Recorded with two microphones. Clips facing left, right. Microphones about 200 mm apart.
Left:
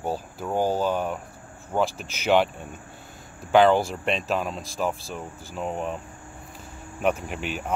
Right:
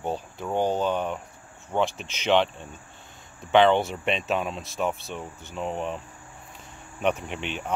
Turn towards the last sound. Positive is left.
turn(degrees=5)  # may be behind; listen again after turning